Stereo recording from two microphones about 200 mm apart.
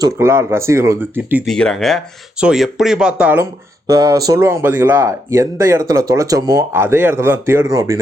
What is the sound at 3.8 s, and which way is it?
Speech, 15° right (ahead or behind).